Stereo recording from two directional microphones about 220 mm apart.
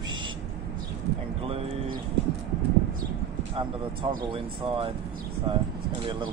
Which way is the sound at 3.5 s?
20° right (ahead or behind).